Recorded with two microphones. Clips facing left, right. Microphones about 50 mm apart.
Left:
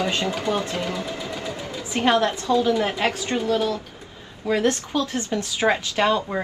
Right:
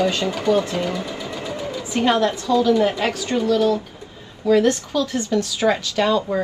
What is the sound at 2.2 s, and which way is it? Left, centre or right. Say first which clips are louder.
A woman's voice: right 2 dB; left.